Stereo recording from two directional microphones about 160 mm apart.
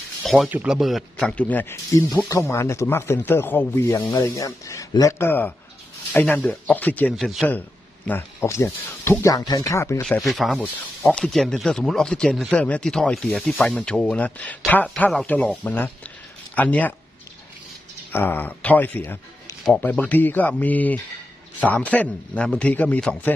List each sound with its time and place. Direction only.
0.2 s a sound: centre (ahead or behind)
0.5 s speech: 10° right (ahead or behind)
7.4 s speech: 10° left (ahead or behind)
10.0 s speech: centre (ahead or behind)
18.1 s speech: 10° left (ahead or behind)